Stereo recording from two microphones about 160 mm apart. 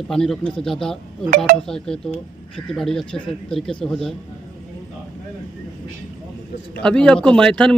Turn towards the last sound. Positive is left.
turn(degrees=5)  # may be behind; listen again after turning